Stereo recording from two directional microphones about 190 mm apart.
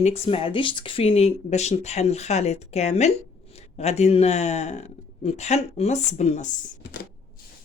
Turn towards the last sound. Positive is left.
turn(degrees=40)  # may be behind; listen again after turning